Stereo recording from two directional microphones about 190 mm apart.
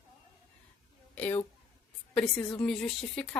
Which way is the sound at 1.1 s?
10° left (ahead or behind).